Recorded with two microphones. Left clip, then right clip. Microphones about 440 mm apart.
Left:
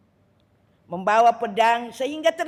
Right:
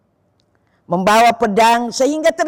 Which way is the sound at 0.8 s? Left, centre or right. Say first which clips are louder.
Right 6 dB; right.